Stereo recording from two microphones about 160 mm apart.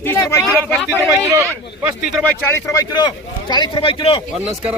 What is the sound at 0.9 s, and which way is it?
Speech, 15° right (ahead or behind).